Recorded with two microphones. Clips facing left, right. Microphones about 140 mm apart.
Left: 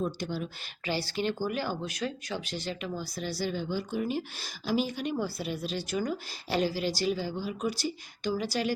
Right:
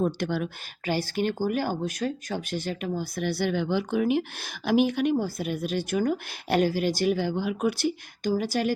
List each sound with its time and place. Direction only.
0.0 s speech: 65° right (ahead or behind)
5.1 s a woman's voice: 50° right (ahead or behind)